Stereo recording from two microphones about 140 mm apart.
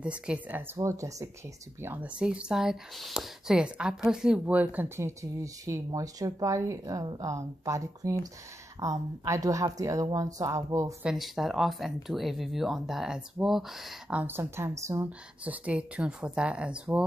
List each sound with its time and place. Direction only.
0.0 s speech: 10° right (ahead or behind)
11.0 s speech: 5° right (ahead or behind); by 15.0 s 20° right (ahead or behind)
15.0 s speech: 10° right (ahead or behind)